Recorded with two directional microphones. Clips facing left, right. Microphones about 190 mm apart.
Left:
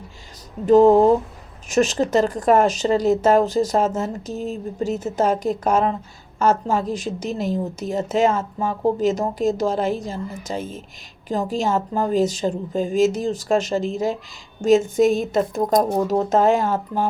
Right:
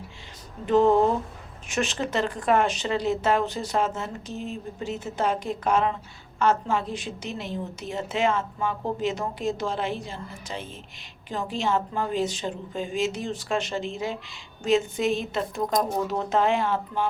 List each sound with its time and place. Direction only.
0.6 s a woman's voice: 40° left (ahead or behind)